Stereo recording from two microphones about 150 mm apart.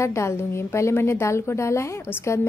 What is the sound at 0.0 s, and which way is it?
A woman's voice, 20° left (ahead or behind).